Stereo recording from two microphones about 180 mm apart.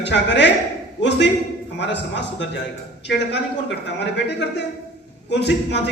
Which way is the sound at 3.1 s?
70° left (ahead or behind).